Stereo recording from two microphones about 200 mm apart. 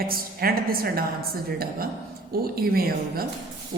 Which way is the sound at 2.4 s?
50° right (ahead or behind).